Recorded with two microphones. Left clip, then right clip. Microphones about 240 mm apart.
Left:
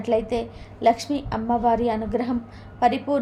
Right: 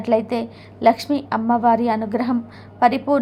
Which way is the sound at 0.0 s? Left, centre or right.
Right.